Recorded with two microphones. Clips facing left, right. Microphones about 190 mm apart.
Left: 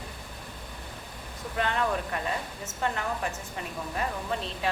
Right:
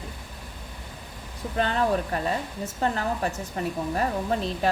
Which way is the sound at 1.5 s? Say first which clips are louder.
Right 4 dB; 35° right (ahead or behind).